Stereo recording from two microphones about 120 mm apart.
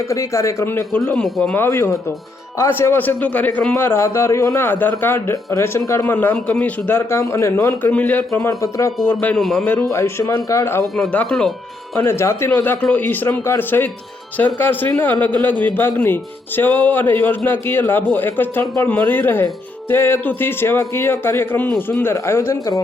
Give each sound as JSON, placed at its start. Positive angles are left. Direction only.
{"t": 0.1, "sound": "speech", "side_deg": 25}
{"t": 0.9, "sound": "speech", "side_deg": 10}
{"t": 1.5, "sound": "speech", "side_deg": 20}
{"t": 3.8, "sound": "speech", "side_deg": 20}
{"t": 8.4, "sound": "speech", "side_deg": 25}
{"t": 9.0, "sound": "speech", "side_deg": 15}
{"t": 9.4, "sound": "a man's voice", "side_deg": 0}
{"t": 9.9, "sound": "speech", "side_deg": 25}
{"t": 10.9, "sound": "speech", "side_deg": 10}
{"t": 11.9, "sound": "speech", "side_deg": 20}